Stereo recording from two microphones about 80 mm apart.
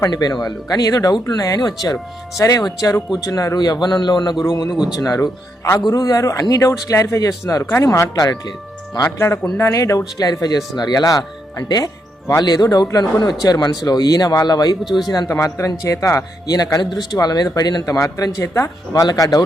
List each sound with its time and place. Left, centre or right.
0.1 s speech: left
4.7 s speech: centre
4.9 s speech: left
8.2 s speech: left
9.1 s speech: left
10.2 s speech: left
15.3 s speech: left
16.5 s speech: left
16.8 s speech: left
17.9 s speech: left